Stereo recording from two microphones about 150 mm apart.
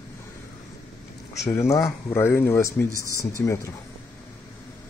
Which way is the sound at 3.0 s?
20° right (ahead or behind).